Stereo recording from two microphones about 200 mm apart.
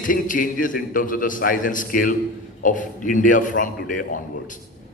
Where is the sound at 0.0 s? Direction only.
45° left (ahead or behind).